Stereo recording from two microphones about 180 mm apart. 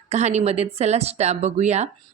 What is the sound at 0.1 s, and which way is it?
A woman's voice, 40° right (ahead or behind).